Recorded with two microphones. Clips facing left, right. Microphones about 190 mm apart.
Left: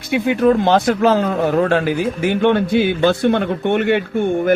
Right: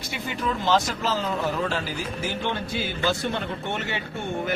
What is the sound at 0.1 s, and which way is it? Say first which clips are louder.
A man's voice: left 15 dB; 60° left (ahead or behind).